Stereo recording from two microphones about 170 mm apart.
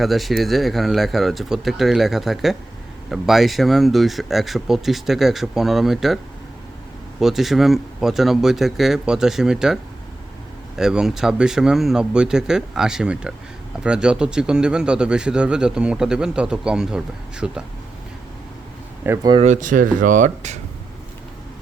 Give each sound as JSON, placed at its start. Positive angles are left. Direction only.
{"t": 0.0, "sound": "a man's voice", "side_deg": 0}
{"t": 7.2, "sound": "a man's voice", "side_deg": 0}
{"t": 10.8, "sound": "a man's voice", "side_deg": -5}
{"t": 19.0, "sound": "speech", "side_deg": -15}
{"t": 19.5, "sound": "speech", "side_deg": -50}